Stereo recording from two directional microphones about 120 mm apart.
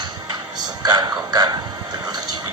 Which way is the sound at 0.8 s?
35° right (ahead or behind).